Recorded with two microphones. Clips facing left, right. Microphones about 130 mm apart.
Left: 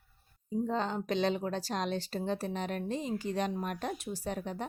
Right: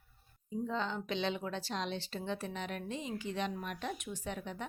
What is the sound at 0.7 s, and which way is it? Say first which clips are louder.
Speech: left 3 dB; 40° left (ahead or behind).